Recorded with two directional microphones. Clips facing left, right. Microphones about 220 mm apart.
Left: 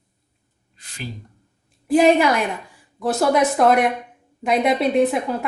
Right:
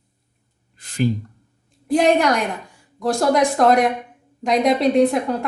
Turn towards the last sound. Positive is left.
turn(degrees=5)  # may be behind; listen again after turning